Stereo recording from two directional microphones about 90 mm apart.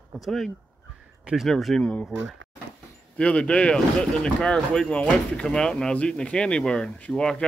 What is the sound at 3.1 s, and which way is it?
Speech, 15° left (ahead or behind).